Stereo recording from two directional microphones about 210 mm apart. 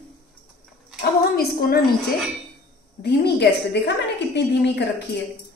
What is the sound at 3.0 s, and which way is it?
A woman's voice, 50° left (ahead or behind).